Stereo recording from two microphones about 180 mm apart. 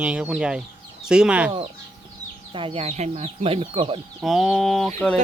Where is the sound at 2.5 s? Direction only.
30° right (ahead or behind).